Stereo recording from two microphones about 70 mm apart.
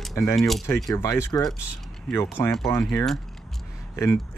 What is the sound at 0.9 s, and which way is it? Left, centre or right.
Speech, left.